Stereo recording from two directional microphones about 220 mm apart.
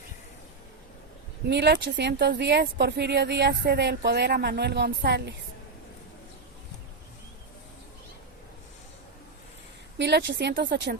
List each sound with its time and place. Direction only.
1.5 s speech: 50° right (ahead or behind)
10.0 s speech: 50° right (ahead or behind)